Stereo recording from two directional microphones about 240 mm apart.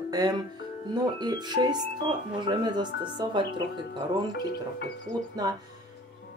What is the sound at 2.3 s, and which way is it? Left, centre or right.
Speech, centre.